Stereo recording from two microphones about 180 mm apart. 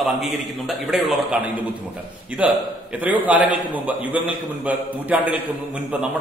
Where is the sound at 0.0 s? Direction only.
Centre (ahead or behind).